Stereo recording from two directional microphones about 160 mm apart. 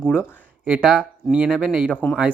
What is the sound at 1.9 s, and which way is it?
Speech, 5° left (ahead or behind).